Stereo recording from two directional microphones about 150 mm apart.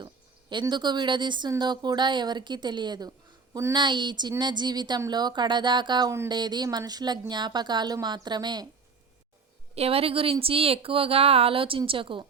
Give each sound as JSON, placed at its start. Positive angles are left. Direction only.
{"t": 0.6, "sound": "speech", "side_deg": -30}
{"t": 9.7, "sound": "a woman's voice", "side_deg": -40}